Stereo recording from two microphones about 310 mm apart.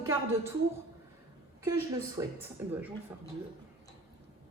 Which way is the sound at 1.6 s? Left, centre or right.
Centre.